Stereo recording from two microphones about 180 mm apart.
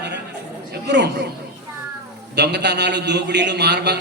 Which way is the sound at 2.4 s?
70° right (ahead or behind).